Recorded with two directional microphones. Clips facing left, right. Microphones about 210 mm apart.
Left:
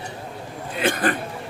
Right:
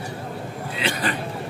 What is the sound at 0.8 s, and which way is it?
Speech, 50° left (ahead or behind).